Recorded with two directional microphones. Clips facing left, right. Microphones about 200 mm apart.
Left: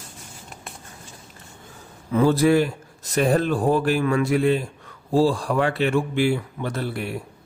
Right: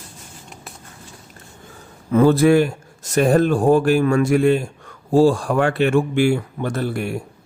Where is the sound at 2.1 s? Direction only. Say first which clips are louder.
Right 4 dB; 50° right (ahead or behind).